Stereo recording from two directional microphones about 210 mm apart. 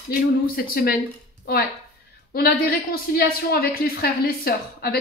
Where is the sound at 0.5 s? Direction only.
45° left (ahead or behind).